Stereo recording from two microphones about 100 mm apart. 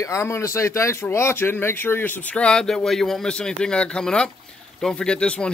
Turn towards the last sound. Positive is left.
turn(degrees=10)  # may be behind; listen again after turning